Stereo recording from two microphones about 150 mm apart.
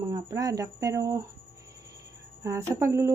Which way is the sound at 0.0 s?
25° right (ahead or behind).